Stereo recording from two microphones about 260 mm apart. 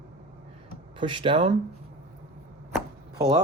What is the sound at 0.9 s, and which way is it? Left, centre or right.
Speech, centre.